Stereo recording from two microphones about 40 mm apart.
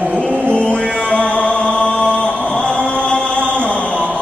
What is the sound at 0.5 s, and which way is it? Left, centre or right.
Music, left.